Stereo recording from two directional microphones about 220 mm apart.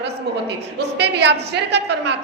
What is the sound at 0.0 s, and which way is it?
A woman's voice, 50° right (ahead or behind).